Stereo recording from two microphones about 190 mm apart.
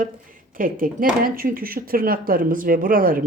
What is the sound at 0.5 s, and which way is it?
Speech, 45° right (ahead or behind).